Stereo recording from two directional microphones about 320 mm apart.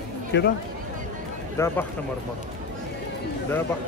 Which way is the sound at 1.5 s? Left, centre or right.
Centre.